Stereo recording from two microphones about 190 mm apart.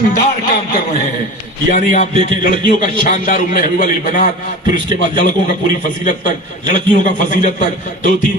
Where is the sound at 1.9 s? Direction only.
40° left (ahead or behind).